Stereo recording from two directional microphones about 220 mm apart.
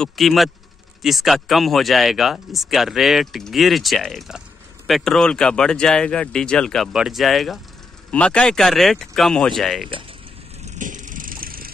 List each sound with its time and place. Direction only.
0.0 s speech: centre (ahead or behind)
10.6 s vehicle: 35° right (ahead or behind)